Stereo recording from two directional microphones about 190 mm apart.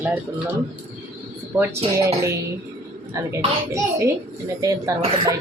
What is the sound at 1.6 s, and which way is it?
Speech, 15° right (ahead or behind).